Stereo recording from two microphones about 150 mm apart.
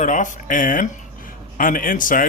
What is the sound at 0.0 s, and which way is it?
Speech, 55° left (ahead or behind).